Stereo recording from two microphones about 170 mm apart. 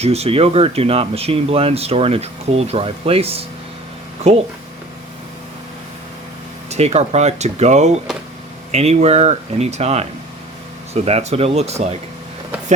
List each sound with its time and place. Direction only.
0.0 s speech: 40° right (ahead or behind)
6.7 s speech: 40° right (ahead or behind)